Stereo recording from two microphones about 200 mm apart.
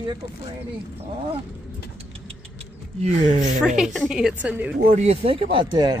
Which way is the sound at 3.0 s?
35° right (ahead or behind).